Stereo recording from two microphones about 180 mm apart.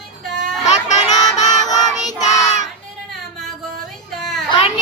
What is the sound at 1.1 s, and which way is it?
Music, 20° left (ahead or behind).